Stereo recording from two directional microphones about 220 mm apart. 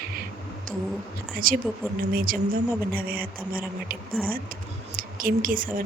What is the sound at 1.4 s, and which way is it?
Speech, 40° right (ahead or behind).